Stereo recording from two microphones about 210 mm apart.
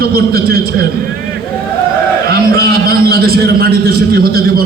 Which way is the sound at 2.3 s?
45° right (ahead or behind).